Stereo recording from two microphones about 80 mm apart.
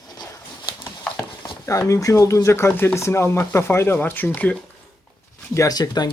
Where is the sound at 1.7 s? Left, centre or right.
Left.